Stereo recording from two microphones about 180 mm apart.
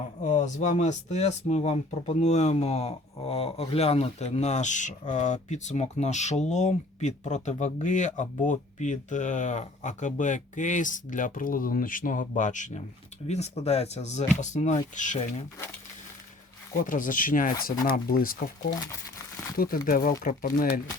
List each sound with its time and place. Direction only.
0.2 s speech: 40° left (ahead or behind)
16.8 s speech: 50° left (ahead or behind)